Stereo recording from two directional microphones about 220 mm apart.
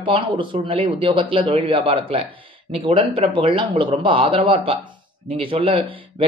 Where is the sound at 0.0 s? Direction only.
20° right (ahead or behind).